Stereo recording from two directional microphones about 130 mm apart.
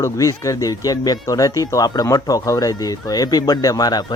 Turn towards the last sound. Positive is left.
turn(degrees=30)  # may be behind; listen again after turning